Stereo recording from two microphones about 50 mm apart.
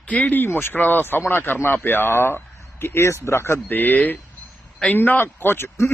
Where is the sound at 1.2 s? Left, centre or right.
Left.